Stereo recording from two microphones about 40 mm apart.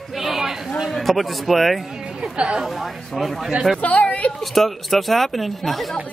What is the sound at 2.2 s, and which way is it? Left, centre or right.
Speech, right.